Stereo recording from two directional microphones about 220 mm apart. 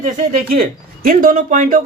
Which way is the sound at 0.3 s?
35° right (ahead or behind).